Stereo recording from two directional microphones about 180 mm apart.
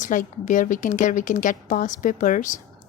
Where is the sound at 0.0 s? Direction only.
45° left (ahead or behind).